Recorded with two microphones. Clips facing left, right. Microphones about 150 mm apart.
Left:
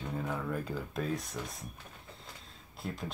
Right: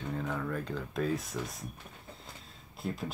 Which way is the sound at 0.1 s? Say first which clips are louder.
Right 1 dB; 5° left (ahead or behind).